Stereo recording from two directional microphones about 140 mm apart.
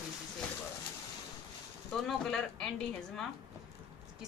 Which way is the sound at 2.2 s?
5° left (ahead or behind).